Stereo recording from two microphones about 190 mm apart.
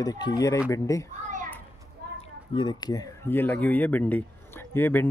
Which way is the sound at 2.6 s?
20° left (ahead or behind).